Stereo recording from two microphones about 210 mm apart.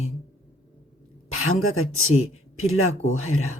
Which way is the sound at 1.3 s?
80° left.